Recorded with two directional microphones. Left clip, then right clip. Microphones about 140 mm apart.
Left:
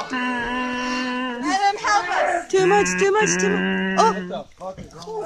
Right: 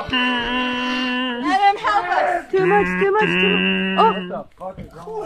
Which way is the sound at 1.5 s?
15° right (ahead or behind).